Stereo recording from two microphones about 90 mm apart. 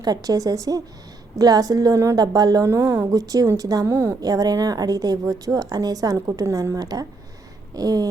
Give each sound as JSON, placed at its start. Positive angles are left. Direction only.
{"t": 0.0, "sound": "speech", "side_deg": -45}
{"t": 2.6, "sound": "speech", "side_deg": -30}
{"t": 3.1, "sound": "a woman's voice", "side_deg": -40}
{"t": 3.8, "sound": "speech", "side_deg": -30}
{"t": 4.2, "sound": "a woman's voice", "side_deg": -45}